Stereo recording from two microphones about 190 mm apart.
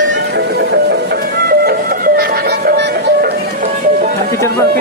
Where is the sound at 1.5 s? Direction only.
55° right (ahead or behind).